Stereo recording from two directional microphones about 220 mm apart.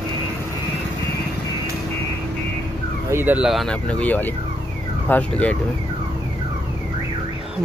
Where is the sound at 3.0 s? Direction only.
10° right (ahead or behind); by 5.6 s 5° left (ahead or behind).